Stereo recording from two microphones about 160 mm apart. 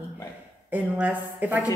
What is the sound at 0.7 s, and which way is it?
Speech, 10° right (ahead or behind).